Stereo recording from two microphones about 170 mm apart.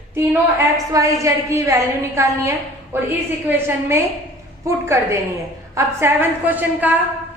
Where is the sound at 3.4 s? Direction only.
15° right (ahead or behind).